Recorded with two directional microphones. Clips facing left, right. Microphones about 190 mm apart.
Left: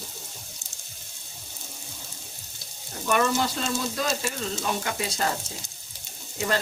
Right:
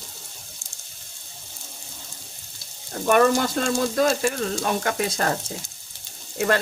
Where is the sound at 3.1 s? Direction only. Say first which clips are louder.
Right 6 dB; 50° right (ahead or behind).